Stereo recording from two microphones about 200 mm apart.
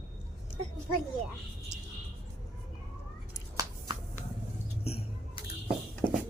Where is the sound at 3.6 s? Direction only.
15° right (ahead or behind).